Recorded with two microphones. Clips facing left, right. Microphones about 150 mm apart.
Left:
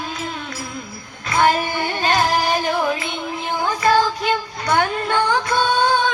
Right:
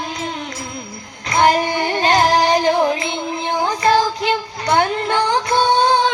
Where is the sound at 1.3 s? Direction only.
35° right (ahead or behind).